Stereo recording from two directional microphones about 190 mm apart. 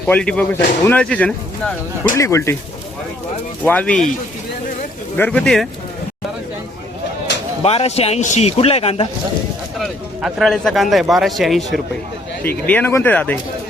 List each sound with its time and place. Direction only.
0.0 s speech: 5° left (ahead or behind)
3.6 s speech: 10° left (ahead or behind)
5.1 s speech: 10° left (ahead or behind)
7.6 s a man's voice: 30° left (ahead or behind)
9.7 s speech: centre (ahead or behind)